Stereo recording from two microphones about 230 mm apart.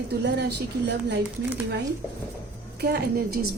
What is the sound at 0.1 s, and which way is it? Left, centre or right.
A woman's voice, right.